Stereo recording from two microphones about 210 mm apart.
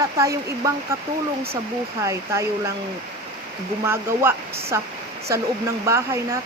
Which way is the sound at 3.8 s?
10° right (ahead or behind).